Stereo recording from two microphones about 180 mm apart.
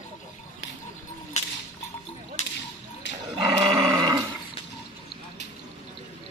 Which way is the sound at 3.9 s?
20° right (ahead or behind).